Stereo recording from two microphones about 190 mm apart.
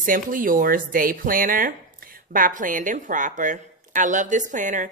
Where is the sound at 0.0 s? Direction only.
45° right (ahead or behind).